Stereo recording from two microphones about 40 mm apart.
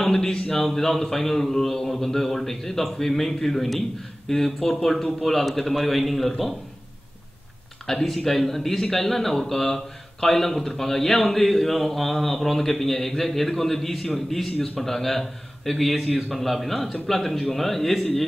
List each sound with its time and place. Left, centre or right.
0.0 s a man's voice: centre
7.8 s a man's voice: centre